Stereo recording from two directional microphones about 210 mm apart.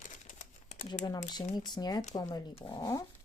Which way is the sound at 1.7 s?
20° left (ahead or behind).